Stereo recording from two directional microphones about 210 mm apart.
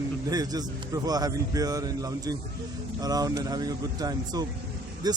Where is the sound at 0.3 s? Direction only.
20° right (ahead or behind).